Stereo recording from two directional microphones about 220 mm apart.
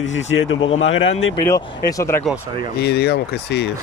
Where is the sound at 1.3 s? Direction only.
15° left (ahead or behind).